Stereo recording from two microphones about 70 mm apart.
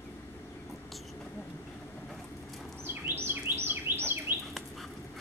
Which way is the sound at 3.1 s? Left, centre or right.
Right.